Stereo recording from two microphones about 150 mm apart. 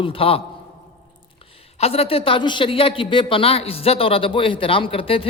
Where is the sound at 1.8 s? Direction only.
40° left (ahead or behind).